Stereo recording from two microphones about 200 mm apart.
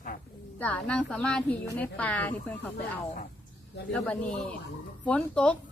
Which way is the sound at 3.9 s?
5° left (ahead or behind).